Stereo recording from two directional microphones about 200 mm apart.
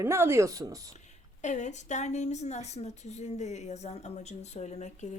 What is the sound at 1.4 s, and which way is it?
Speech, 35° left (ahead or behind).